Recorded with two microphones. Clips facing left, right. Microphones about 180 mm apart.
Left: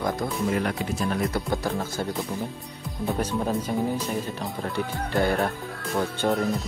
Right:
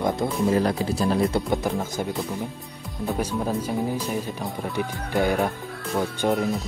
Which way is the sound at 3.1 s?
5° right (ahead or behind).